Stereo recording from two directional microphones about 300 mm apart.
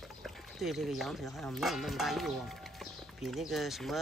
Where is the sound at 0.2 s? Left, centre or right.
Centre.